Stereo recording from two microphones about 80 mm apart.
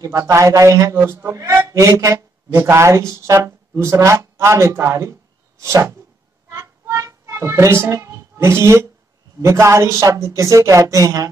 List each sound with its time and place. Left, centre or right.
0.0 s a man's voice: right
6.5 s a sound: right
9.4 s a man's voice: right